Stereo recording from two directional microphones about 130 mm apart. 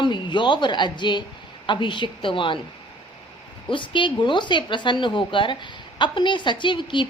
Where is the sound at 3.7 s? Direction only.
40° left (ahead or behind).